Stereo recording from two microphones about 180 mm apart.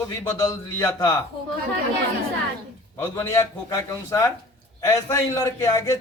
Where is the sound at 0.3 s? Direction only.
15° left (ahead or behind).